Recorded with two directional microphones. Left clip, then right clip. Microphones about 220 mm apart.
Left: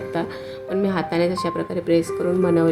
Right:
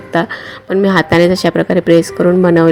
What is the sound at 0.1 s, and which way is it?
A woman's voice, 30° right (ahead or behind).